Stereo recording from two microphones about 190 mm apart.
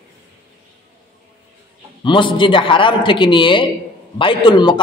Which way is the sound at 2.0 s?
25° left (ahead or behind).